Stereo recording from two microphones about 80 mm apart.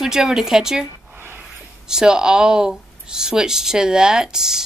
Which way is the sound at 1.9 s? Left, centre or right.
Centre.